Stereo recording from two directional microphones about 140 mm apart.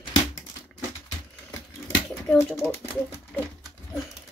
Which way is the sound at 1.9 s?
10° left (ahead or behind).